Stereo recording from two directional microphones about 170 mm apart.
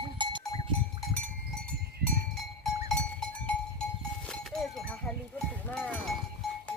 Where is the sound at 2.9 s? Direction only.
5° left (ahead or behind).